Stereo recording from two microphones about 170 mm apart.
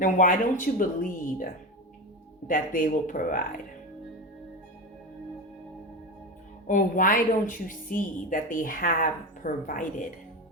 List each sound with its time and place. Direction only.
0.0 s a woman's voice: 50° left (ahead or behind)
6.7 s a woman's voice: 50° left (ahead or behind)